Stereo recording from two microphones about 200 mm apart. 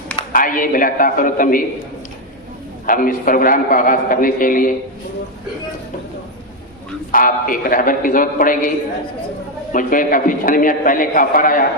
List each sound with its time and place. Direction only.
0.3 s a man's voice: 45° left (ahead or behind)
2.9 s a man's voice: 40° left (ahead or behind)
7.1 s a man's voice: 45° left (ahead or behind)